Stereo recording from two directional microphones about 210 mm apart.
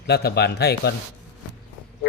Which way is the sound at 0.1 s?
50° left (ahead or behind).